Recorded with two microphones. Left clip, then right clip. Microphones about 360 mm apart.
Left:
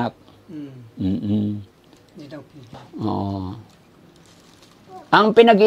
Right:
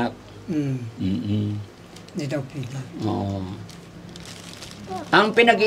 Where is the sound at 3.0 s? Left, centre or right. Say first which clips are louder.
Left 2 dB; left.